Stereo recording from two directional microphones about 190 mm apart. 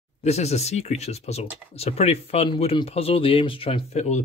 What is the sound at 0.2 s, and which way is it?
Speech, 35° left (ahead or behind).